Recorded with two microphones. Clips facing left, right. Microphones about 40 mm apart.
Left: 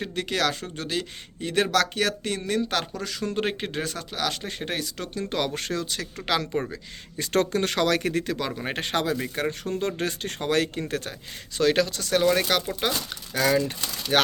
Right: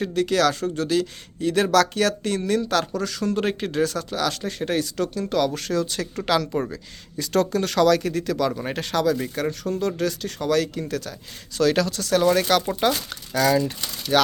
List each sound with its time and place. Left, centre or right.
0.0 s speech: centre
6.2 s speech: centre
6.5 s speech: centre
7.2 s speech: left
8.3 s speech: left
8.7 s speech: left
11.5 s speech: centre